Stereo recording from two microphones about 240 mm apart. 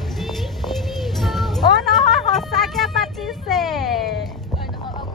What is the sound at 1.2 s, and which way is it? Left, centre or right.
Music, centre.